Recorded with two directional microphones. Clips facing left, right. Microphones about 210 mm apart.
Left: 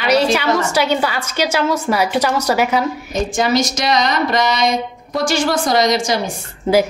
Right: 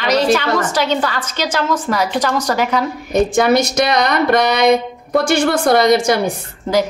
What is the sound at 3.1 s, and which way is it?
Speech, 60° right (ahead or behind).